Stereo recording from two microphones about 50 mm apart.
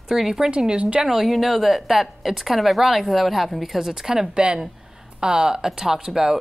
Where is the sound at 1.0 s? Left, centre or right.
Centre.